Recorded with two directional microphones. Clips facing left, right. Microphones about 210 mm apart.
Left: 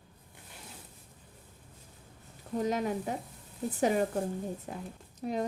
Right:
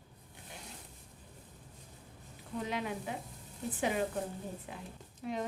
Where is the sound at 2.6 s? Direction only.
40° left (ahead or behind).